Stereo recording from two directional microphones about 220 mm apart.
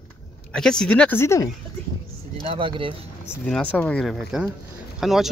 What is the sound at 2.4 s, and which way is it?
Speech, 25° right (ahead or behind).